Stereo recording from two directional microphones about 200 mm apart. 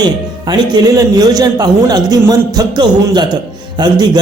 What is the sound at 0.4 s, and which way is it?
Speech, 20° right (ahead or behind).